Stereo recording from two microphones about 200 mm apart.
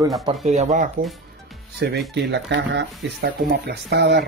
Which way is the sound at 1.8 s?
60° right (ahead or behind).